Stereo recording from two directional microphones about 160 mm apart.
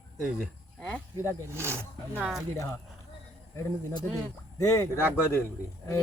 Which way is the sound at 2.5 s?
20° left (ahead or behind).